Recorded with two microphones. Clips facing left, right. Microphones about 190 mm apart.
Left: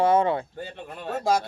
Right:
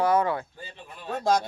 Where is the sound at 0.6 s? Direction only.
60° left (ahead or behind).